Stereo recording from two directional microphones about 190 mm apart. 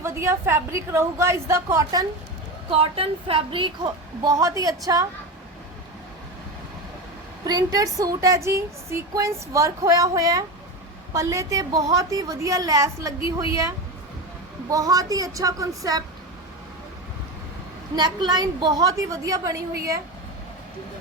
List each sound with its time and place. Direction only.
0.0 s speech: 15° right (ahead or behind)
2.6 s a woman's voice: 30° right (ahead or behind)
7.4 s a woman's voice: 20° right (ahead or behind)
17.9 s a woman's voice: 20° right (ahead or behind)